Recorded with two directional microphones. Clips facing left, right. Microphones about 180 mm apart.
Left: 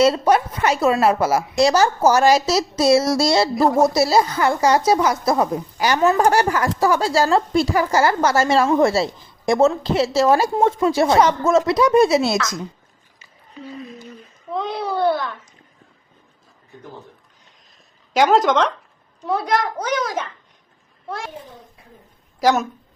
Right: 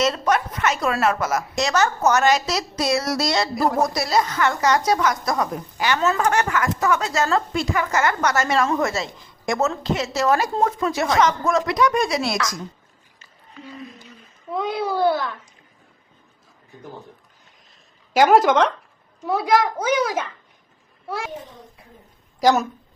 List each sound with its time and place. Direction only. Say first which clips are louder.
0.0 s a woman's voice: left 5 dB; 30° left (ahead or behind)
14.5 s a child's voice: even; centre (ahead or behind)
18.1 s a child's voice: right 1 dB; 5° right (ahead or behind)
22.4 s a woman's voice: even; centre (ahead or behind)